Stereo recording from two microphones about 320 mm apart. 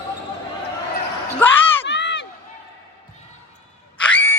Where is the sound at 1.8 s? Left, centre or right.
Left.